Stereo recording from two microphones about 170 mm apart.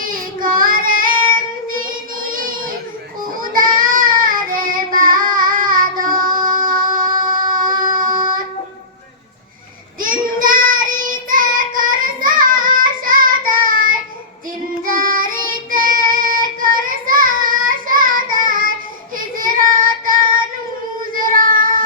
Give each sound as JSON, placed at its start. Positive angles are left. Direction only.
{"t": 0.0, "sound": "child singing", "side_deg": -55}
{"t": 10.0, "sound": "child singing", "side_deg": -55}